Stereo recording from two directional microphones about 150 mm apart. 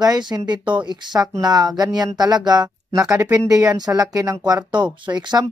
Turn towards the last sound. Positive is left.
turn(degrees=-30)  # may be behind; listen again after turning